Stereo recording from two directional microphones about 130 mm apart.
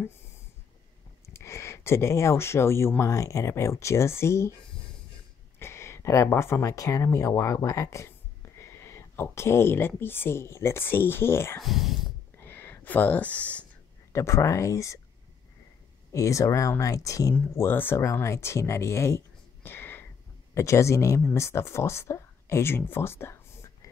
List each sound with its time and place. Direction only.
1.2 s speech: 20° left (ahead or behind)
5.6 s speech: 20° left (ahead or behind)
11.6 s speech: centre (ahead or behind)
12.4 s a sound: 15° left (ahead or behind)
14.1 s speech: 20° left (ahead or behind)
16.1 s speech: 25° left (ahead or behind)